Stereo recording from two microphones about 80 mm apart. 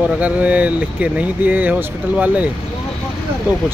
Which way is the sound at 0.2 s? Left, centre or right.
Centre.